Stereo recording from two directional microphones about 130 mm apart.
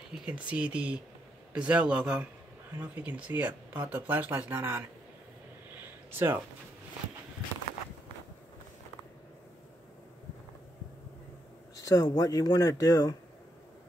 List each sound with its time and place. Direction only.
0.1 s speech: 10° right (ahead or behind)
6.1 s speech: 15° right (ahead or behind)
11.8 s speech: 25° left (ahead or behind)